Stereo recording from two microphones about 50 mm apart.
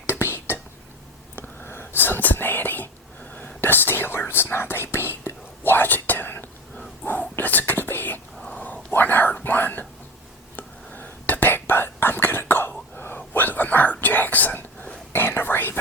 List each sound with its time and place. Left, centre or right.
0.1 s whispering: left
15.1 s whispering: left